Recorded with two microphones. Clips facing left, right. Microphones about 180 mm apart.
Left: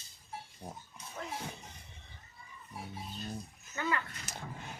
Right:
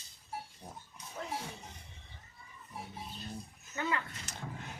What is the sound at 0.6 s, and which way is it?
Speech, 30° left (ahead or behind).